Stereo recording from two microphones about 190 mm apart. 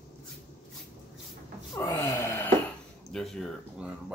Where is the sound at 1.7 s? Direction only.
20° left (ahead or behind).